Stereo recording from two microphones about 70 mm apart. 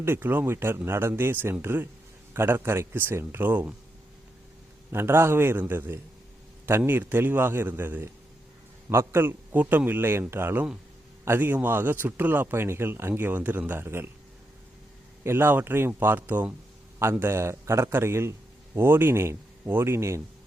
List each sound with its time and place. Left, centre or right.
0.0 s a man's voice: right
4.9 s a man's voice: right
15.2 s a man's voice: right